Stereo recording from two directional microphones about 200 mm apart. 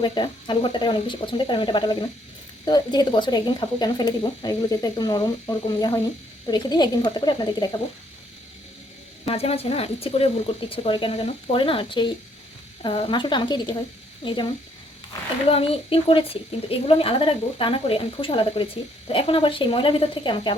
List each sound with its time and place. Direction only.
0.0 s a woman's voice: 25° left (ahead or behind)
9.2 s a woman's voice: 30° left (ahead or behind)
15.4 s a woman's voice: 30° left (ahead or behind)